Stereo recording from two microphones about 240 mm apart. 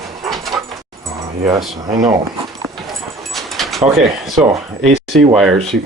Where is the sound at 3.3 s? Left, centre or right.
Centre.